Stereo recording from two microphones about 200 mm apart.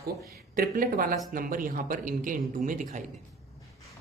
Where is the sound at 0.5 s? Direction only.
45° right (ahead or behind).